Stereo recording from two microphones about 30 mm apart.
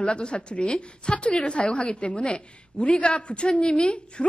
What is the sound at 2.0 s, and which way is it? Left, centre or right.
A woman's voice, left.